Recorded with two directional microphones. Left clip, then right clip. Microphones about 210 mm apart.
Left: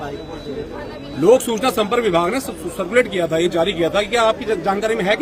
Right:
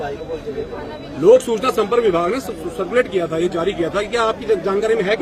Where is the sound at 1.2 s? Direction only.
55° left (ahead or behind).